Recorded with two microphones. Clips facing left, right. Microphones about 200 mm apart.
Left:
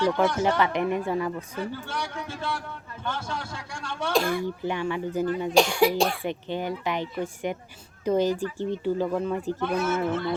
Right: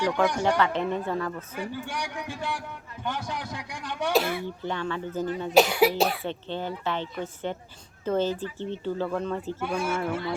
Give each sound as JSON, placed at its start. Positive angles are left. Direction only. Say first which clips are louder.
{"t": 0.0, "sound": "a man's voice", "louder": "left 1 dB", "side_deg": -15}
{"t": 0.6, "sound": "speech", "louder": "left 1 dB", "side_deg": 15}
{"t": 1.5, "sound": "a man's voice", "louder": "left 1 dB", "side_deg": -15}
{"t": 4.1, "sound": "cough", "louder": "left 1 dB", "side_deg": -5}
{"t": 4.4, "sound": "speech", "louder": "left 3 dB", "side_deg": 10}
{"t": 5.5, "sound": "cough", "louder": "right 1 dB", "side_deg": -5}
{"t": 6.2, "sound": "speech", "louder": "left 2 dB", "side_deg": 15}
{"t": 9.5, "sound": "a man's voice", "louder": "left 4 dB", "side_deg": -10}